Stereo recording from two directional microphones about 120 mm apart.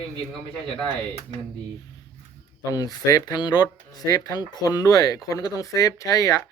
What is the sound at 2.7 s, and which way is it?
Speech, 30° left (ahead or behind).